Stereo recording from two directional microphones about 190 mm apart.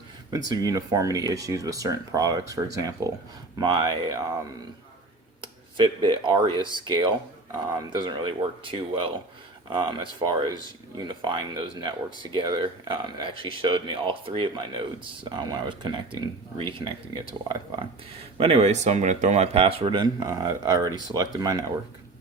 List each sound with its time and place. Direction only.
0.3 s speech: 20° right (ahead or behind)
5.4 s speech: 25° right (ahead or behind)
18.3 s speech: 35° right (ahead or behind)